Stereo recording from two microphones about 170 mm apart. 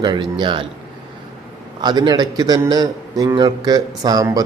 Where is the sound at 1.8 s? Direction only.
25° right (ahead or behind).